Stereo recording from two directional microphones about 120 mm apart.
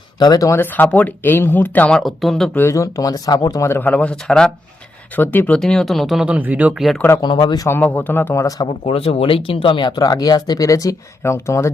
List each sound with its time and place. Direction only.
0.2 s speech: 30° left (ahead or behind); by 2.5 s centre (ahead or behind)
2.6 s speech: 25° left (ahead or behind); by 4.5 s 5° left (ahead or behind)
5.1 s speech: 15° left (ahead or behind)
5.5 s speech: 5° left (ahead or behind)
6.2 s speech: 15° right (ahead or behind)
7.2 s speech: 40° left (ahead or behind)
7.7 s speech: 15° left (ahead or behind)
8.9 s speech: 55° left (ahead or behind); by 11.7 s 25° left (ahead or behind)